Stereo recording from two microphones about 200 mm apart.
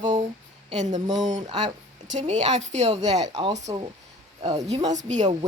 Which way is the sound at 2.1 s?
35° right (ahead or behind).